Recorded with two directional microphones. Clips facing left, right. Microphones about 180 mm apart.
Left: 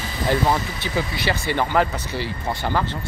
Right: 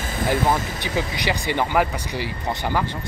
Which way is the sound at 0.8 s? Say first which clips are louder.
Even; 15° right (ahead or behind).